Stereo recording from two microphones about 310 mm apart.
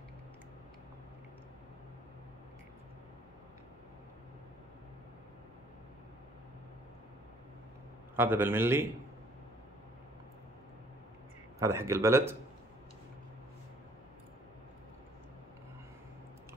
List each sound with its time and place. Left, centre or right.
8.2 s speech: centre
11.6 s speech: centre